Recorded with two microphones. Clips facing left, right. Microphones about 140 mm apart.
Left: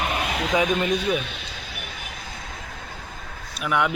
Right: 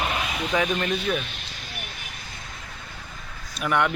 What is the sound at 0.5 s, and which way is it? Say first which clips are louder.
Speech: left 3 dB; 15° left (ahead or behind).